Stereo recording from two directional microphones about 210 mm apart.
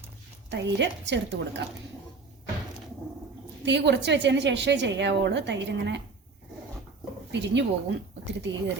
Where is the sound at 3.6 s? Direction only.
55° right (ahead or behind).